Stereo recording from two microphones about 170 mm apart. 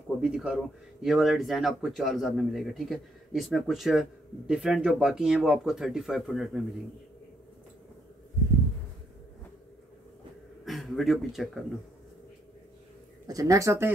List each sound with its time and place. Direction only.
0.2 s speech: 5° right (ahead or behind)
10.6 s speech: centre (ahead or behind)
13.3 s speech: 20° right (ahead or behind)